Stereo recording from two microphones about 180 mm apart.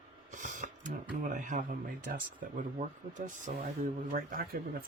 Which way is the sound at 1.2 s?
45° right (ahead or behind).